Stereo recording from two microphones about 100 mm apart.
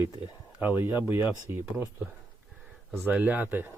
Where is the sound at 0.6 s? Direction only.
20° right (ahead or behind).